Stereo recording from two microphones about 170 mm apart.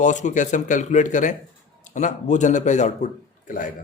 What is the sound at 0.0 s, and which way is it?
A man's voice, 45° left (ahead or behind).